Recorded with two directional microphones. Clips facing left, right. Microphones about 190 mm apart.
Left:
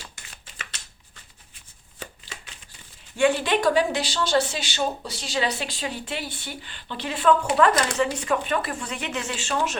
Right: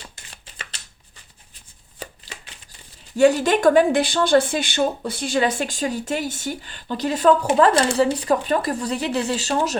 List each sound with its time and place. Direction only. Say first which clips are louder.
3.2 s speech: right 5 dB; 40° right (ahead or behind)